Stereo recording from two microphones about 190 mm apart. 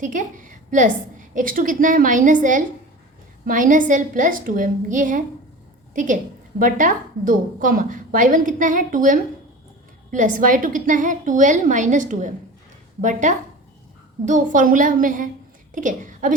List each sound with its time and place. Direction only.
0.0 s a woman's voice: 40° right (ahead or behind)